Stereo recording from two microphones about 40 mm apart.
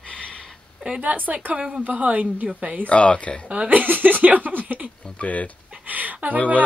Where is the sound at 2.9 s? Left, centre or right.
Left.